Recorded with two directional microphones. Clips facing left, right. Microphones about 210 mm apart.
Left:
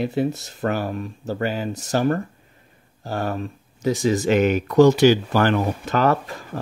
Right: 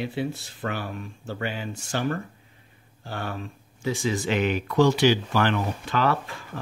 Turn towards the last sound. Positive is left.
turn(degrees=40)  # may be behind; listen again after turning